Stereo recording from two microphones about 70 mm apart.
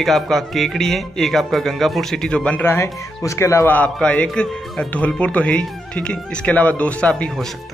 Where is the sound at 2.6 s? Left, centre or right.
Left.